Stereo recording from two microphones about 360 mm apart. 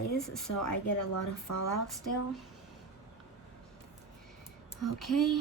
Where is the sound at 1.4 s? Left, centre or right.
Left.